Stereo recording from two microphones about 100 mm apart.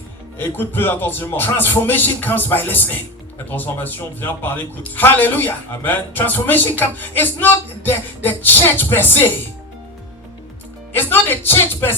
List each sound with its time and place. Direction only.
0.3 s speech: 20° left (ahead or behind)
10.9 s speech: 20° left (ahead or behind)